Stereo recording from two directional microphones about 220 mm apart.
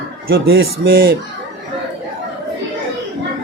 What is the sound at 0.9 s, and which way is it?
Speech, 40° right (ahead or behind).